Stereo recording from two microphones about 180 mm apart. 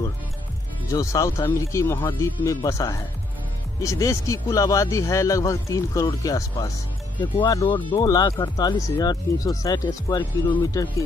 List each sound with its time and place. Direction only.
0.8 s speech: 20° left (ahead or behind)